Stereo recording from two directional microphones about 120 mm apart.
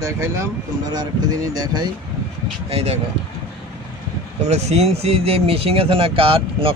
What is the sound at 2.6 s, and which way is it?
Speech, 60° right (ahead or behind).